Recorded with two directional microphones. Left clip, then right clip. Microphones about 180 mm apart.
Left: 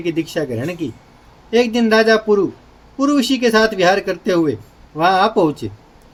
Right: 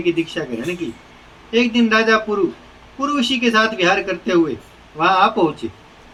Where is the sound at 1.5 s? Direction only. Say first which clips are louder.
Left 2 dB; 85° left.